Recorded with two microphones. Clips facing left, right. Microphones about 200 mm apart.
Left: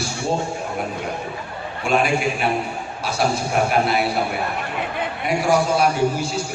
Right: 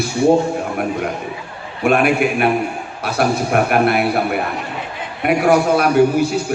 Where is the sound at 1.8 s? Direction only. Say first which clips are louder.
Right 5 dB; 60° right (ahead or behind).